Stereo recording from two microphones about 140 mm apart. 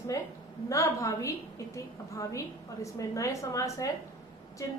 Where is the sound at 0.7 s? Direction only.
20° left (ahead or behind).